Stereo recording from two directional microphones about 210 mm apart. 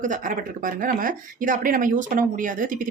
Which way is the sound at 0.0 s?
40° right (ahead or behind).